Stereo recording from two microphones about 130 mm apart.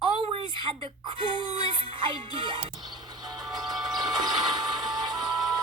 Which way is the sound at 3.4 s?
Centre (ahead or behind).